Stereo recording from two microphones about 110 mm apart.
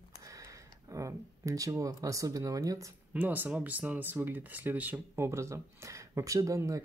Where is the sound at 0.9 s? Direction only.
30° right (ahead or behind).